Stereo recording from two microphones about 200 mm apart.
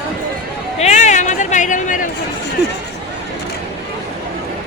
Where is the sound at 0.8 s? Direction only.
35° left (ahead or behind).